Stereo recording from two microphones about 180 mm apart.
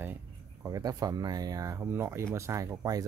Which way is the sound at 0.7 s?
20° right (ahead or behind).